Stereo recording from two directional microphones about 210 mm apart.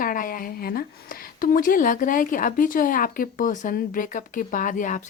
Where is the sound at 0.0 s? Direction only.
40° left (ahead or behind).